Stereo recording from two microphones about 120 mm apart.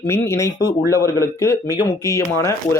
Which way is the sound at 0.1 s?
25° left (ahead or behind).